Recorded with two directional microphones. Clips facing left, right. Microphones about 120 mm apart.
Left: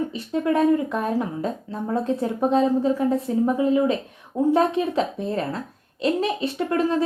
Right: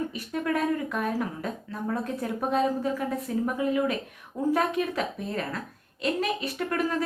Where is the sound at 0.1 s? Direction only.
30° left (ahead or behind).